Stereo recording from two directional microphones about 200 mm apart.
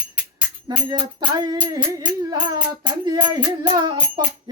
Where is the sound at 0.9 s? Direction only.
25° right (ahead or behind).